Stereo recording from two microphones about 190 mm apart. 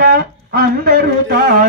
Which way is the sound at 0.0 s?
50° right (ahead or behind).